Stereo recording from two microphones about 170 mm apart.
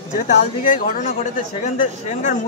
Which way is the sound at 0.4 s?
50° left (ahead or behind).